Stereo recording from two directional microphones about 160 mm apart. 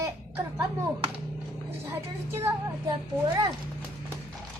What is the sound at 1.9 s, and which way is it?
Music, 15° right (ahead or behind).